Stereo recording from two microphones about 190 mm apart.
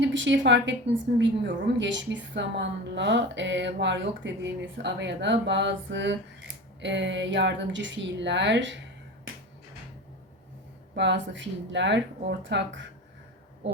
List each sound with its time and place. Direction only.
0.0 s a woman's voice: 70° right (ahead or behind)
10.9 s a woman's voice: 65° right (ahead or behind)